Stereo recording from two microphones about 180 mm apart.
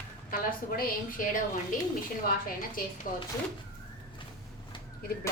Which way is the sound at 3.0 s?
50° left (ahead or behind).